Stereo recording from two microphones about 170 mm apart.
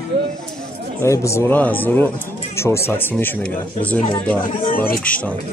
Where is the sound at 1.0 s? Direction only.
15° left (ahead or behind).